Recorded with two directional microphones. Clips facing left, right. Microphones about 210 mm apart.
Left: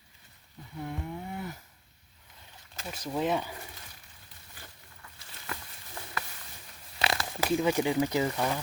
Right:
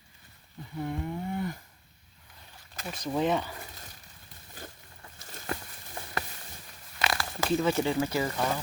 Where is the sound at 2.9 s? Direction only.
5° left (ahead or behind).